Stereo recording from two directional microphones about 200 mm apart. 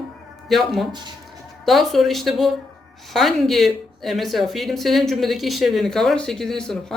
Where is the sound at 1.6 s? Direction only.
Centre (ahead or behind).